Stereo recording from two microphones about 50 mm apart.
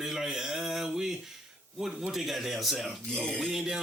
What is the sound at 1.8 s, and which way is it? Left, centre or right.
Speech, centre.